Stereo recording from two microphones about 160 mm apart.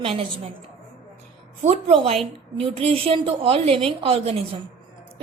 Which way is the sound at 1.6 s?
35° right (ahead or behind).